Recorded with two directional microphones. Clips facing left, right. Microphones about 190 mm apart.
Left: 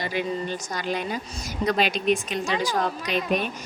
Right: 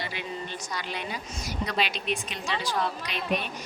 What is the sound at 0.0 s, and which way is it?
A woman's voice, 45° left (ahead or behind).